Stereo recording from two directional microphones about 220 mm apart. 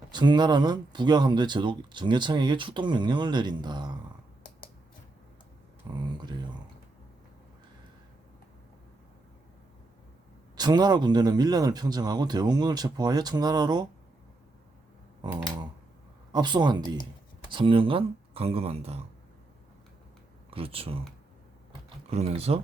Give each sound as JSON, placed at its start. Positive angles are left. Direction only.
{"t": 0.1, "sound": "speech", "side_deg": -20}
{"t": 6.1, "sound": "speech", "side_deg": -20}
{"t": 10.6, "sound": "speech", "side_deg": -20}
{"t": 16.3, "sound": "speech", "side_deg": -20}
{"t": 20.5, "sound": "speech", "side_deg": -25}
{"t": 22.1, "sound": "speech", "side_deg": -25}